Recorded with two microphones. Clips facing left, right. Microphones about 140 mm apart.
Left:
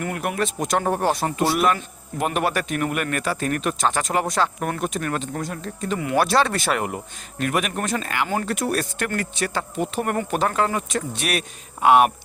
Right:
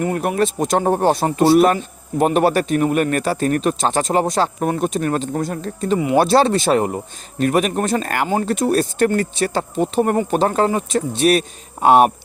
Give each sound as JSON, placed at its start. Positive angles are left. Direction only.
{"t": 0.0, "sound": "speech", "side_deg": -30}
{"t": 6.0, "sound": "speech", "side_deg": -25}
{"t": 8.0, "sound": "speech", "side_deg": -45}
{"t": 8.3, "sound": "speech", "side_deg": -25}